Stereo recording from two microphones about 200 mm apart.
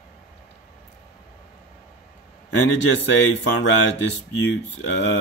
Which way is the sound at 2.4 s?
65° left (ahead or behind).